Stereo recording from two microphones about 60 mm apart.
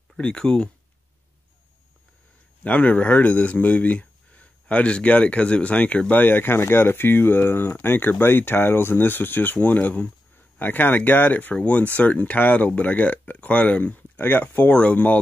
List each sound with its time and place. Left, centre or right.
0.2 s speech: centre
2.6 s speech: left